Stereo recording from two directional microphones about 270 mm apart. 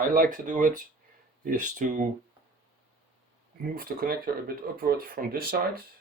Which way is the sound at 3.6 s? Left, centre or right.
Right.